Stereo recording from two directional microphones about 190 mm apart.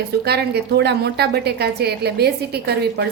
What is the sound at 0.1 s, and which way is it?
A woman's voice, 60° right (ahead or behind).